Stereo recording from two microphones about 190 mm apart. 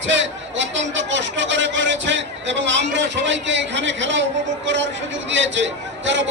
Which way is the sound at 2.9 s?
70° right (ahead or behind).